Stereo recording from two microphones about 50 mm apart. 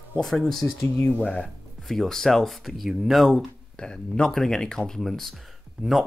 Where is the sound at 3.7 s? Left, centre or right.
Centre.